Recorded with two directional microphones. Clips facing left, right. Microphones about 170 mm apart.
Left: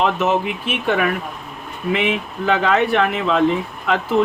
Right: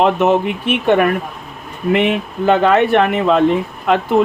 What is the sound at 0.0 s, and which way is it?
Speech, 55° right (ahead or behind).